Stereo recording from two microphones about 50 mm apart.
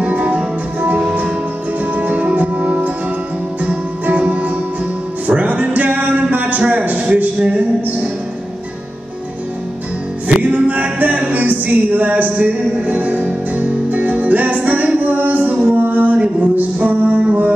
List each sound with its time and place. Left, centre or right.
0.0 s music: right
6.6 s a sound: right
10.2 s music: right